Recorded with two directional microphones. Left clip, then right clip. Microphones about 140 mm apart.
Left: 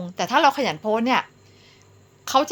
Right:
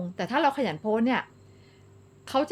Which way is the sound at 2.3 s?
35° right (ahead or behind).